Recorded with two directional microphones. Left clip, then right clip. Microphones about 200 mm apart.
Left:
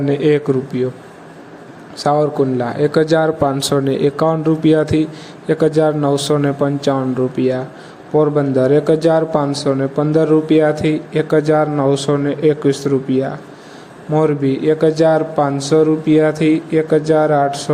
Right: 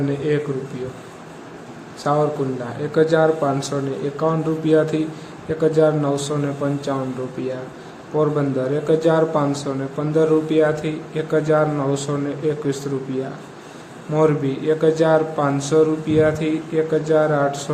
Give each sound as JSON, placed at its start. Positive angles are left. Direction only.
{"t": 0.1, "sound": "speech", "side_deg": 40}
{"t": 2.0, "sound": "speech", "side_deg": 35}
{"t": 14.1, "sound": "speech", "side_deg": 25}